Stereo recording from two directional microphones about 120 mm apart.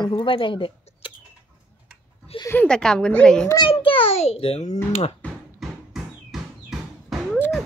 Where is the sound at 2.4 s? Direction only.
15° left (ahead or behind).